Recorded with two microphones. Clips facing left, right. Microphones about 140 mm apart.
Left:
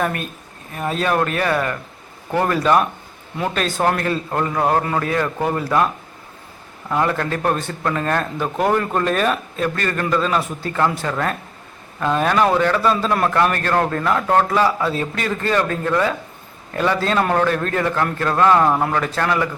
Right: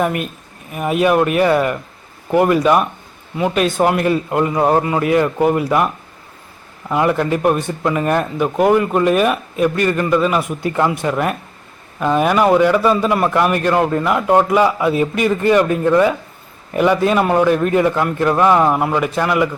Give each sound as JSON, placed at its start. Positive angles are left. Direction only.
{"t": 0.0, "sound": "a man's voice", "side_deg": -15}